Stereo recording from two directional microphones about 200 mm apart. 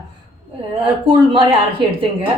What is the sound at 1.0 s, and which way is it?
Speech, 25° right (ahead or behind).